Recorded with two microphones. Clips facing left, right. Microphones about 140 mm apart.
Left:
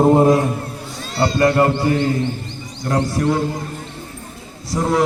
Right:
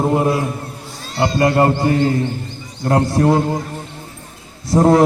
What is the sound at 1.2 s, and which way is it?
Speech, 25° right (ahead or behind).